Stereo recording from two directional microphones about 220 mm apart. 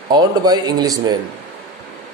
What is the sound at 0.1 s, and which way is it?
Speech, 20° right (ahead or behind).